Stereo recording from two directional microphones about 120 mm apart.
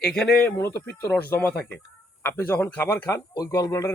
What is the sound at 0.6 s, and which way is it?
A man's voice, 20° left (ahead or behind).